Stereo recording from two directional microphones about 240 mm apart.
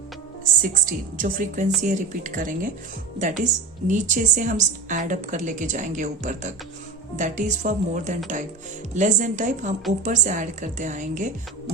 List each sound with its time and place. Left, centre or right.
0.6 s a woman's voice: right